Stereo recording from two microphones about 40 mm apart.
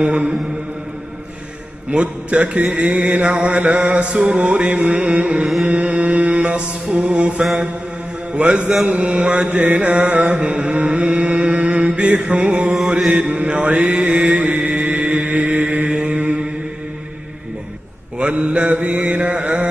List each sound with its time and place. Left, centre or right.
0.0 s mantra: right
1.9 s mantra: right
9.8 s chant: right
12.4 s mantra: right
15.9 s mantra: right
18.1 s mantra: right
18.9 s chant: right